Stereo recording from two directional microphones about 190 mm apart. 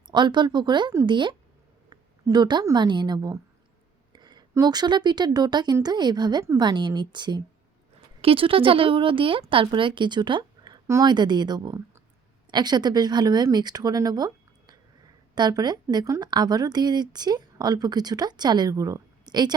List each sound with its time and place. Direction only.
0.1 s a woman's voice: 25° right (ahead or behind)